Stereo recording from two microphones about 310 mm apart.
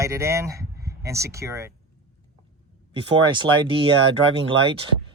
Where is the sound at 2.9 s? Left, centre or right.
Centre.